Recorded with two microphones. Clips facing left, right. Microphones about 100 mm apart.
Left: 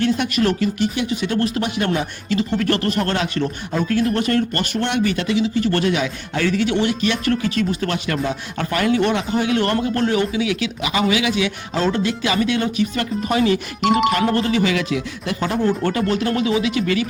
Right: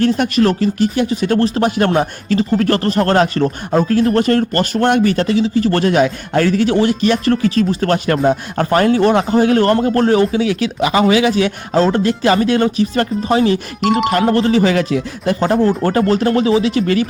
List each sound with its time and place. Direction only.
0.0 s speech: 40° right (ahead or behind)